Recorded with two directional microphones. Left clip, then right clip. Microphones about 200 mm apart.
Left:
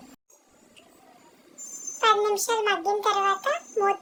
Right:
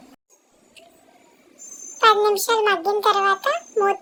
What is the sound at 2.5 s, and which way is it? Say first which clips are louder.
A child's voice: right 5 dB; 25° right (ahead or behind).